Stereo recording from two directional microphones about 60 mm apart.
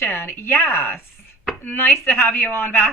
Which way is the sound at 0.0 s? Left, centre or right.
Left.